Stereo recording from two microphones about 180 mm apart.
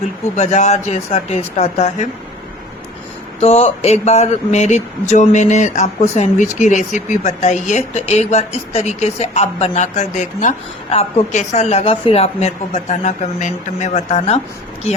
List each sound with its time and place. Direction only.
0.3 s speech: 40° left (ahead or behind)
3.4 s speech: 35° left (ahead or behind)